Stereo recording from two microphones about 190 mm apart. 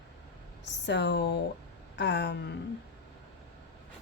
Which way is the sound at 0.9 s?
65° left (ahead or behind).